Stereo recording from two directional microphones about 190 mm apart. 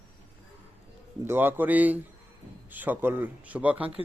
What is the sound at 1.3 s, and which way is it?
Speech, 10° right (ahead or behind).